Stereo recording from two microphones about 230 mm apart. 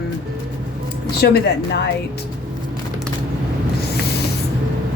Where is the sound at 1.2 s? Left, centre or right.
Left.